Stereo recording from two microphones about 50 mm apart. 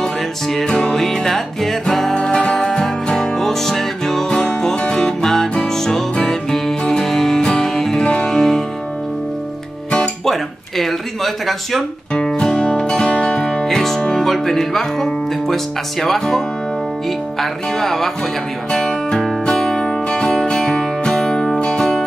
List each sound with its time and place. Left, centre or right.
0.0 s music: centre
10.2 s a sound: centre
12.1 s music: centre
13.7 s speech: centre
18.7 s music: centre